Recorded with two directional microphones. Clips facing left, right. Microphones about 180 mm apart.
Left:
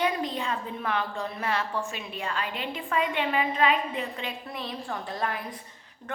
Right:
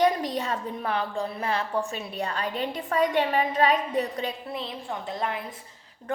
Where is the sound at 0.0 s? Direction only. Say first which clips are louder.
Right 4 dB; 40° right (ahead or behind).